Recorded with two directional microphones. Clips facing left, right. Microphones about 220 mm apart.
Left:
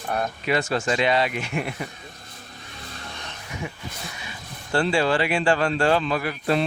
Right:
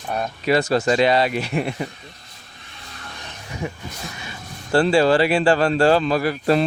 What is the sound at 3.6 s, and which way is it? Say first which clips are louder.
Speech: right 6 dB; 40° right (ahead or behind).